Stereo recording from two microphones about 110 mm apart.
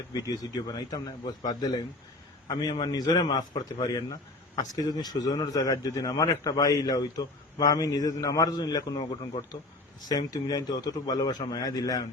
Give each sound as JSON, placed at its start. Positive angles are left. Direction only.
{"t": 0.1, "sound": "speech", "side_deg": 35}
{"t": 2.5, "sound": "speech", "side_deg": 35}
{"t": 10.1, "sound": "speech", "side_deg": 35}